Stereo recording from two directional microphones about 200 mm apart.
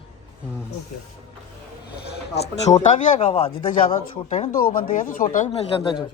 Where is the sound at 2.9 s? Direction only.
35° left (ahead or behind).